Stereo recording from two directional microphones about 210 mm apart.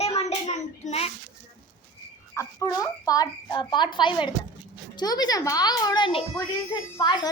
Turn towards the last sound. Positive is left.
turn(degrees=20)  # may be behind; listen again after turning